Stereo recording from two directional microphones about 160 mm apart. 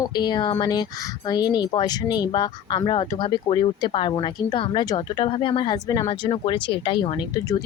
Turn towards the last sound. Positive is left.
turn(degrees=30)  # may be behind; listen again after turning